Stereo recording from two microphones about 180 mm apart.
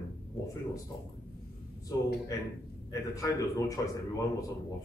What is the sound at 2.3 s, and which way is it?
Speech, 20° left (ahead or behind).